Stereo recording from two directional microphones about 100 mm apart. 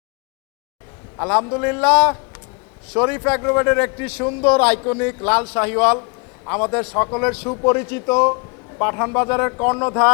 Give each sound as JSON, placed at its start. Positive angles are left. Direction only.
{"t": 1.2, "sound": "a man's voice", "side_deg": 25}